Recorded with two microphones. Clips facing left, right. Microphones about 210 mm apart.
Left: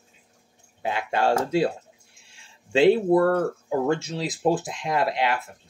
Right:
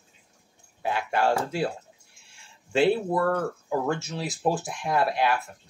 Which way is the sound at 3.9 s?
20° left (ahead or behind).